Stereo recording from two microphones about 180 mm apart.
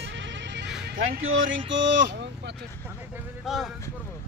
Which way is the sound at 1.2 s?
90° right.